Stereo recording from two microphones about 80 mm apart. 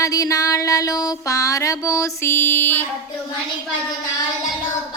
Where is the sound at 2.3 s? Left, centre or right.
Left.